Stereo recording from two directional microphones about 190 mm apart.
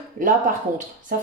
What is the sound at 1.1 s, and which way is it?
Speech, 50° right (ahead or behind).